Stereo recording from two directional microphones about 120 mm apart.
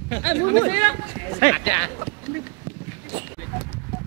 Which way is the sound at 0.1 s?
20° right (ahead or behind).